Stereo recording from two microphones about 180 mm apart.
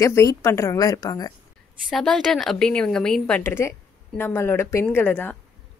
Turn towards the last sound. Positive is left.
turn(degrees=10)  # may be behind; listen again after turning